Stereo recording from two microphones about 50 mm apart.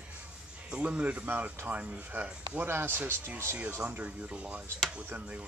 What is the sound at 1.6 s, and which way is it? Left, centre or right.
Speech, right.